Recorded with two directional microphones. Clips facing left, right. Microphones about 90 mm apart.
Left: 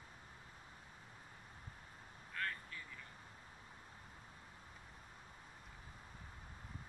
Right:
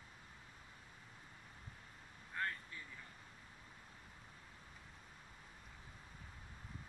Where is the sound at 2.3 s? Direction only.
25° right (ahead or behind).